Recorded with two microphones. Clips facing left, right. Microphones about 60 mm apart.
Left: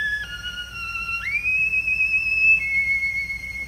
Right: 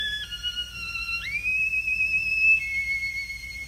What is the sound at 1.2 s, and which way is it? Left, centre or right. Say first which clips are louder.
Whistle: left 5 dB; left.